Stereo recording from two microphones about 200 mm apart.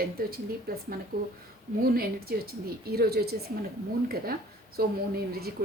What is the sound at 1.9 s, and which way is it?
Speech, 50° right (ahead or behind).